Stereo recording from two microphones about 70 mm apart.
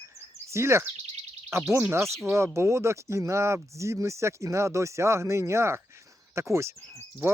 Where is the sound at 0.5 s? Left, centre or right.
Right.